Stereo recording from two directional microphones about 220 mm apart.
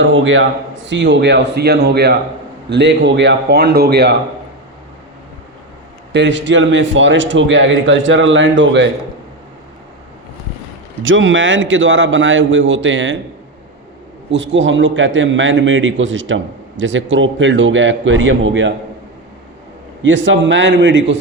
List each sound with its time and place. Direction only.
0.0 s a man's voice: 60° right (ahead or behind)
6.1 s a man's voice: 55° right (ahead or behind)
11.0 s a man's voice: 60° right (ahead or behind)
14.3 s a man's voice: 55° right (ahead or behind)
20.0 s a man's voice: 55° right (ahead or behind)